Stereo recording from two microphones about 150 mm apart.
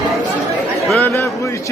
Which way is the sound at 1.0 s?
20° left (ahead or behind).